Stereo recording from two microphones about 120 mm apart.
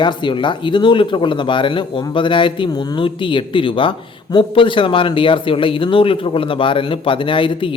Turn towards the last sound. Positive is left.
turn(degrees=45)  # may be behind; listen again after turning